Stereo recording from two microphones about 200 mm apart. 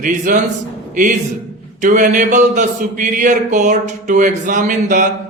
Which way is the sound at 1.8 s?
40° right (ahead or behind).